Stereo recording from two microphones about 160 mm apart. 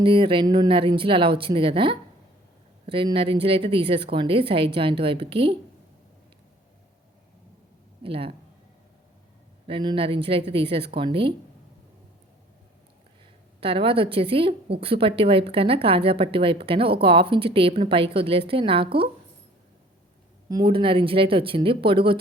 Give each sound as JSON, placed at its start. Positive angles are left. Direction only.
{"t": 0.0, "sound": "speech", "side_deg": -35}
{"t": 8.0, "sound": "speech", "side_deg": -35}
{"t": 9.6, "sound": "speech", "side_deg": -35}
{"t": 13.6, "sound": "speech", "side_deg": -35}
{"t": 20.5, "sound": "speech", "side_deg": -30}